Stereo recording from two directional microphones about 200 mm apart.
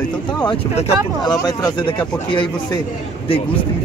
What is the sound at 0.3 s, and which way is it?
Speech, 25° left (ahead or behind).